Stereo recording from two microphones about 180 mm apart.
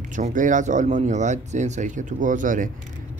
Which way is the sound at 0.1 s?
45° right (ahead or behind).